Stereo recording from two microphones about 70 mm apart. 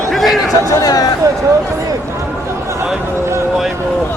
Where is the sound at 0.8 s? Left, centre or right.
Left.